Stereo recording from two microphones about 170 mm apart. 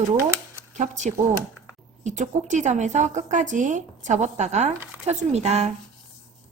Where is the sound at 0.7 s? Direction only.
45° right (ahead or behind).